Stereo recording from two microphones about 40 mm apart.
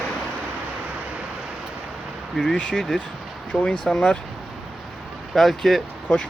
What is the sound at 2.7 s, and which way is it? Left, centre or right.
Speech, centre.